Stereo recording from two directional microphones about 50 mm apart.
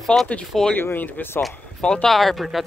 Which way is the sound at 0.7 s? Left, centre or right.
Left.